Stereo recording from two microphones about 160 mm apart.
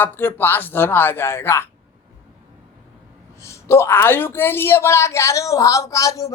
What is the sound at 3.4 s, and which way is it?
Speech, 15° left (ahead or behind).